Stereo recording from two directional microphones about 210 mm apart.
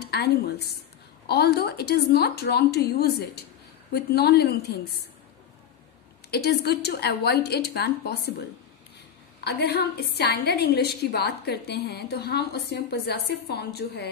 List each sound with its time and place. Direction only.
0.0 s a woman's voice: 50° left (ahead or behind)
6.3 s a woman's voice: 50° left (ahead or behind)